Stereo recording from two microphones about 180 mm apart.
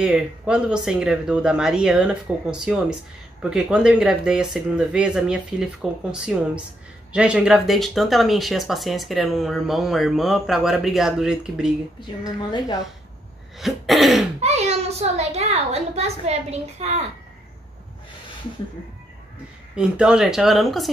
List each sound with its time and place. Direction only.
0.0 s speech: 5° right (ahead or behind)
12.4 s a woman's voice: 25° left (ahead or behind)
13.6 s speech: centre (ahead or behind)
14.4 s a child's voice: 35° right (ahead or behind)
19.7 s speech: 5° right (ahead or behind)